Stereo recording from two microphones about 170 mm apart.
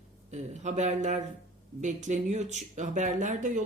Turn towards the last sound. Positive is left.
turn(degrees=-45)  # may be behind; listen again after turning